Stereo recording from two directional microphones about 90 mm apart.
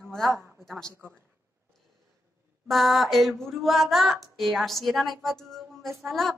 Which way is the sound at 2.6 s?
Centre (ahead or behind).